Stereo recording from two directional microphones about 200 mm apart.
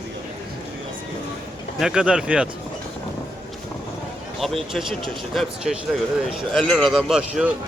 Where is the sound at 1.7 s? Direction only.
5° right (ahead or behind).